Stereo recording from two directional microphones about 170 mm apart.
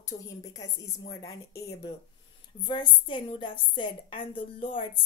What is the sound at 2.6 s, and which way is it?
A woman's voice, 25° left (ahead or behind).